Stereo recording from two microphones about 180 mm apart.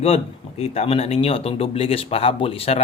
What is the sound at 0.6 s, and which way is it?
Speech, 35° left (ahead or behind).